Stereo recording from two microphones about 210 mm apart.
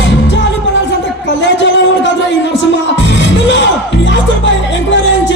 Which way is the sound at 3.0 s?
60° left (ahead or behind).